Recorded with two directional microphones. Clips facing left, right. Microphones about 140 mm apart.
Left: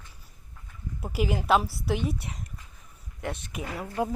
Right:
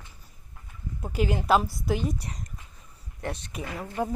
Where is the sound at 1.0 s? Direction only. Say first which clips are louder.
Right 1 dB; 5° left (ahead or behind).